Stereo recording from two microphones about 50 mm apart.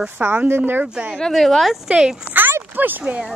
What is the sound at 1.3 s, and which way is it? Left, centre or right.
Speech, centre.